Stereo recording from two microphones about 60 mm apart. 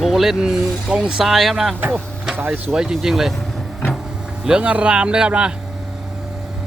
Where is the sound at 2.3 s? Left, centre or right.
Right.